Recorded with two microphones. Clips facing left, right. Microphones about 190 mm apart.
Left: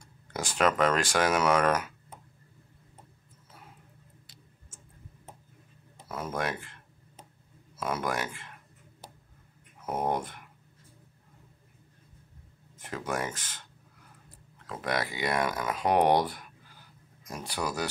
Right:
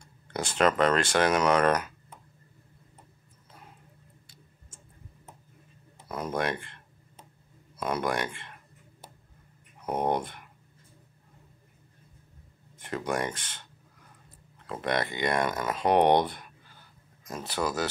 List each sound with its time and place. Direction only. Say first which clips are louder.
0.3 s speech: right 2 dB; 10° left (ahead or behind)
6.1 s speech: right 3 dB; 5° left (ahead or behind)
9.8 s speech: right 2 dB; 5° left (ahead or behind)
12.7 s speech: right 3 dB; 5° left (ahead or behind)
14.7 s speech: right 2 dB; centre (ahead or behind)